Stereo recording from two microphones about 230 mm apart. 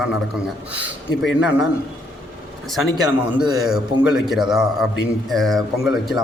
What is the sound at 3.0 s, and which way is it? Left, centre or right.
Speech, centre.